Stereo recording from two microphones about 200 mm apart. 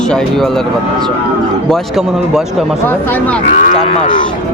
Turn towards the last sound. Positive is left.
turn(degrees=35)  # may be behind; listen again after turning